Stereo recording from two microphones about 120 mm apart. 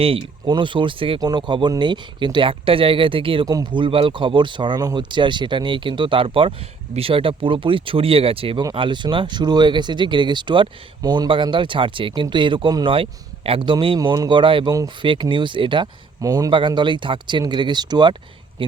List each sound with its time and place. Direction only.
0.0 s speech: 50° right (ahead or behind)
3.4 s speech: 35° right (ahead or behind)
16.2 s a man's voice: 30° right (ahead or behind)
16.5 s speech: 40° right (ahead or behind)